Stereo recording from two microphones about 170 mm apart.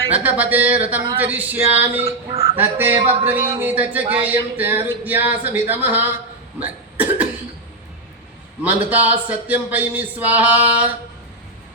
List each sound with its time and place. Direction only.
0.1 s speech: 10° right (ahead or behind)
2.0 s speech: 35° right (ahead or behind)
2.6 s speech: 10° right (ahead or behind)
6.6 s cough: 10° right (ahead or behind)
8.6 s speech: 10° right (ahead or behind)